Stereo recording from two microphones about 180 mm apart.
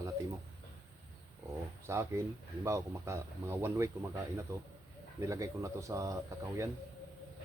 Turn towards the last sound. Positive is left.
turn(degrees=-15)  # may be behind; listen again after turning